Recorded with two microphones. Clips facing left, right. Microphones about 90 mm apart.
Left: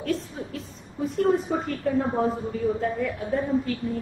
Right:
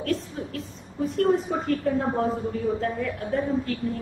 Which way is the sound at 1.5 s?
Centre (ahead or behind).